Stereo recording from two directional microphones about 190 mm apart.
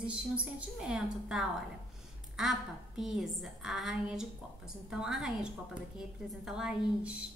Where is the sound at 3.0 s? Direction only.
Centre (ahead or behind).